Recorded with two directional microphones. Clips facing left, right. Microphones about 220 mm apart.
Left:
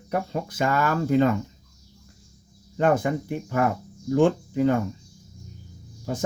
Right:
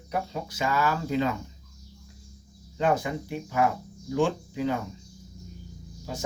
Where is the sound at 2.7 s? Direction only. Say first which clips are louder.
Left 4 dB; 55° left (ahead or behind).